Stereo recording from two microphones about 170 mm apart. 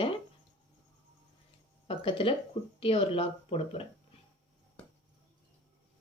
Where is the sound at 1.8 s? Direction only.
30° left (ahead or behind).